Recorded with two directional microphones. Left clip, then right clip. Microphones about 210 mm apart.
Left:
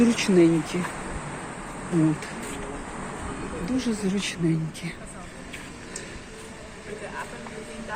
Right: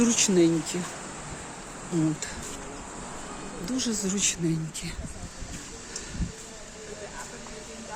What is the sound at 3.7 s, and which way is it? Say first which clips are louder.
Speech: left 2 dB; 15° right (ahead or behind).